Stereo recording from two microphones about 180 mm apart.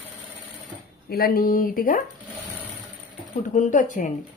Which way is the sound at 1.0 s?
55° left (ahead or behind).